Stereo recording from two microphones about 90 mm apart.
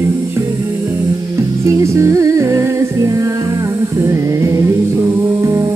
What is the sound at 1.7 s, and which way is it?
Music, 35° right (ahead or behind).